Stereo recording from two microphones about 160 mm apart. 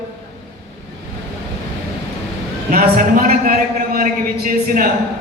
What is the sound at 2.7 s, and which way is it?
A man's voice, 65° right (ahead or behind).